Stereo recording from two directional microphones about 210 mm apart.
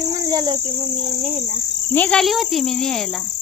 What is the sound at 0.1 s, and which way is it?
Cricket, 15° right (ahead or behind).